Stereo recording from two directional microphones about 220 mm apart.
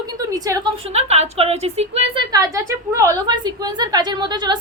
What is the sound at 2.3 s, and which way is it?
A woman's voice, 15° right (ahead or behind).